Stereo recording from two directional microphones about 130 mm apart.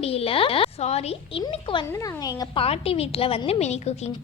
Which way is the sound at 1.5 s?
40° left (ahead or behind).